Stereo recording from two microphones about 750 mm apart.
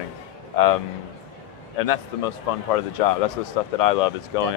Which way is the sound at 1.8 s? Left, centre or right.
Left.